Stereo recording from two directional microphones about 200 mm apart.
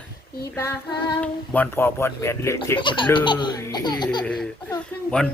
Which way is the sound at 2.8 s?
25° left (ahead or behind).